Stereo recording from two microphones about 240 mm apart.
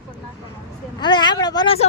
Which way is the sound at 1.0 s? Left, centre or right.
Centre.